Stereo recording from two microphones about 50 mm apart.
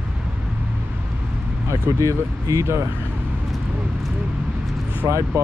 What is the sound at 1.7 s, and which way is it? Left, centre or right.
Speech, right.